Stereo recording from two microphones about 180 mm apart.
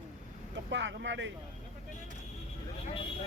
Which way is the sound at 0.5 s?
90° right.